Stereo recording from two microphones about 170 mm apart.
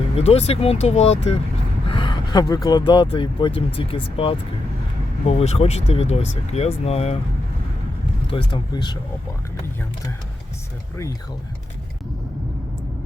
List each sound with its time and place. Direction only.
0.2 s speech: 35° left (ahead or behind)
1.9 s gasp: 30° left (ahead or behind)
2.6 s speech: 25° left (ahead or behind)
8.3 s speech: 30° left (ahead or behind)